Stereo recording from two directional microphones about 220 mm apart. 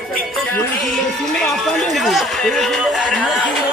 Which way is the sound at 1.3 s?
Centre (ahead or behind).